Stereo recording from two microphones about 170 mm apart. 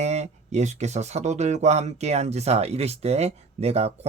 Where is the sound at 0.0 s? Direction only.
40° right (ahead or behind).